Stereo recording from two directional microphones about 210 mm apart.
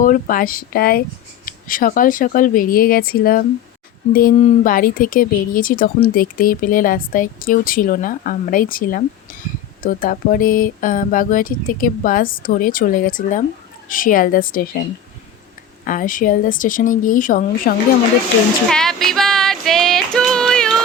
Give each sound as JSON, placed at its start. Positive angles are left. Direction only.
{"t": 0.0, "sound": "speech", "side_deg": 40}
{"t": 15.8, "sound": "speech", "side_deg": 40}
{"t": 18.7, "sound": "music", "side_deg": 0}